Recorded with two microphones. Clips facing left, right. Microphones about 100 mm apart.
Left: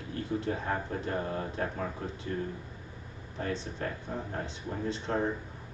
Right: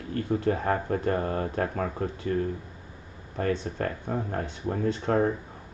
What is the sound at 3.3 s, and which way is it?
Speech, 50° right (ahead or behind).